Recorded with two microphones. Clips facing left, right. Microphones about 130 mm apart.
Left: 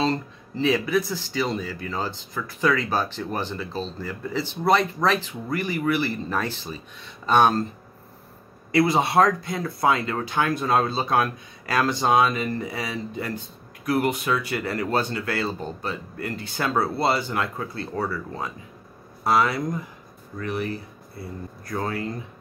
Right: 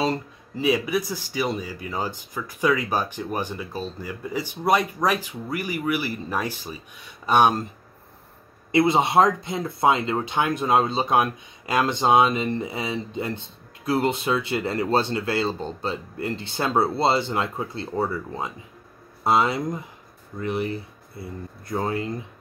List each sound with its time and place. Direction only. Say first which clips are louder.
0.0 s speech: even; 10° right (ahead or behind)
8.7 s speech: right 1 dB; 20° right (ahead or behind)